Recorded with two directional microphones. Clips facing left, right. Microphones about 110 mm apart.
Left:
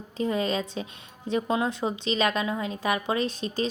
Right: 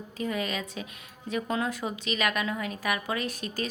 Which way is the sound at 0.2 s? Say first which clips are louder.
Left 5 dB; 30° left (ahead or behind).